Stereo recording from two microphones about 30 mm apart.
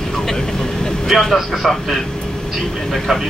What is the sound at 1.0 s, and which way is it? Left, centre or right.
Speech, centre.